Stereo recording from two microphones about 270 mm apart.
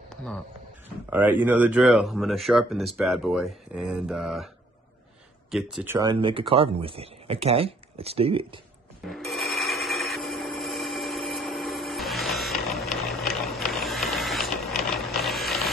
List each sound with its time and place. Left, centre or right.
0.1 s a sound: centre
0.8 s speech: centre
5.5 s speech: centre
9.0 s telephone bell ringing: centre